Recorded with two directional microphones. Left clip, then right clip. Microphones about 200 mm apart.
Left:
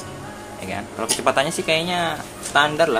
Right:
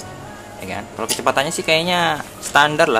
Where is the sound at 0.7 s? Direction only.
10° right (ahead or behind).